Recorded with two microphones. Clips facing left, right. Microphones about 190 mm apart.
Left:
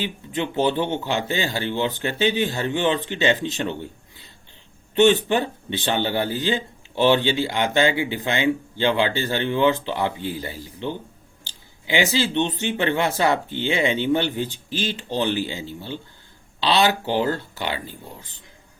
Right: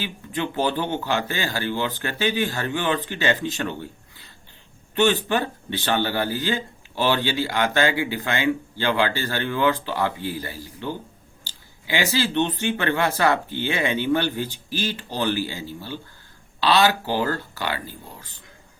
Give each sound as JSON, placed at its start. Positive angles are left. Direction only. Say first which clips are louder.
{"t": 0.0, "sound": "speech", "louder": "left 2 dB", "side_deg": 20}